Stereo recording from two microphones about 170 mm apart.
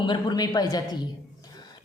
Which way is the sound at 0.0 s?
25° left (ahead or behind).